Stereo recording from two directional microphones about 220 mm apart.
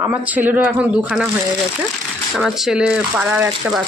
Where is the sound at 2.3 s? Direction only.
Centre (ahead or behind).